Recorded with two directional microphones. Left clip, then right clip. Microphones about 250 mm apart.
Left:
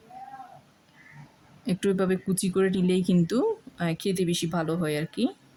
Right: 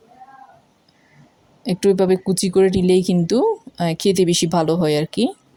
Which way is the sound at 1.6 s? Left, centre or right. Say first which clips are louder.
Right 10 dB; centre.